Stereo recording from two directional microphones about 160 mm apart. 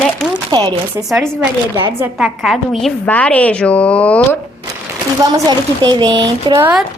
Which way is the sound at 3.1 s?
10° left (ahead or behind).